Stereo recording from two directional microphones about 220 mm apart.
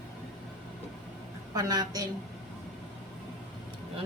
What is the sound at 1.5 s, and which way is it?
Speech, 20° right (ahead or behind).